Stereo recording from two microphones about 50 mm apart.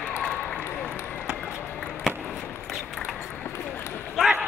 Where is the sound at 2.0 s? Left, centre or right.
Centre.